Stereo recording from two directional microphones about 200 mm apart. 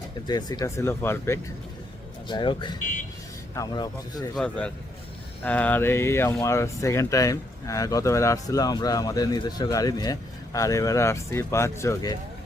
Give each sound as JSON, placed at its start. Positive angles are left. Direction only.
{"t": 0.3, "sound": "speech", "side_deg": 20}
{"t": 2.2, "sound": "speech", "side_deg": 25}
{"t": 4.4, "sound": "a man's voice", "side_deg": 5}